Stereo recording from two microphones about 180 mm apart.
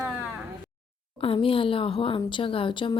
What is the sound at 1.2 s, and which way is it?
A woman's voice, 30° left (ahead or behind).